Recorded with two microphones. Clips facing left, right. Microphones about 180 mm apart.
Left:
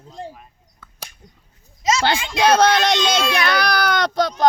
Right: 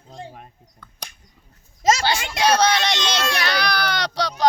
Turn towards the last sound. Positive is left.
turn(degrees=50)  # may be behind; listen again after turning